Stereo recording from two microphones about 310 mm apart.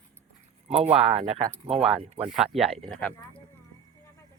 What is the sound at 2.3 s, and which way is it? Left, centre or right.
Speech, centre.